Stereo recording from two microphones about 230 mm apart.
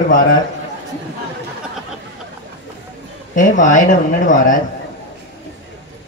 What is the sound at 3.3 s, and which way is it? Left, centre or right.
Speech, left.